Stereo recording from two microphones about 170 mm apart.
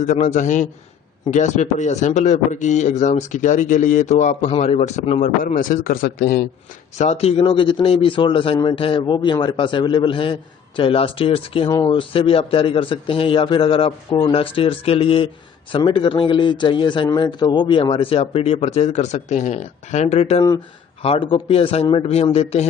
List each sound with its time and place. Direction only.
0.0 s a man's voice: 45° left (ahead or behind)
5.4 s a man's voice: 55° left (ahead or behind)
7.0 s a man's voice: 40° left (ahead or behind)